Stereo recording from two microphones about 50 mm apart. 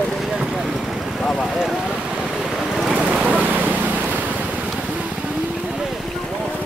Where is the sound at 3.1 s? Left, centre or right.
Right.